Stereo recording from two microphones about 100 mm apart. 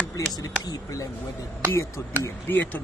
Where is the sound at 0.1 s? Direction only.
40° left (ahead or behind).